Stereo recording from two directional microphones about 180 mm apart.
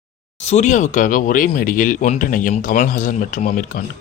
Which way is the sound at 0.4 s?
40° left (ahead or behind).